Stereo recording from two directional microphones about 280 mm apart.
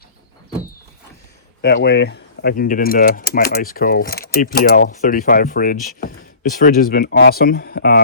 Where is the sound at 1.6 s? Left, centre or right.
Left.